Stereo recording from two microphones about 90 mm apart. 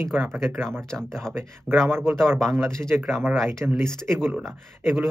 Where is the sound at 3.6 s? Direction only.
15° right (ahead or behind).